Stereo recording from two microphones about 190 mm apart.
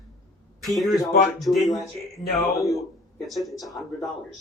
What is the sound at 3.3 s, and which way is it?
Speech, centre (ahead or behind).